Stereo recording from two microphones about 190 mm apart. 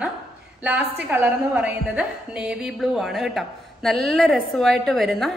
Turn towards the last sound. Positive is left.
turn(degrees=0)  # may be behind; listen again after turning